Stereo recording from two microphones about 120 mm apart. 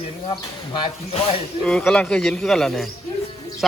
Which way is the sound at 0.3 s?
40° left (ahead or behind).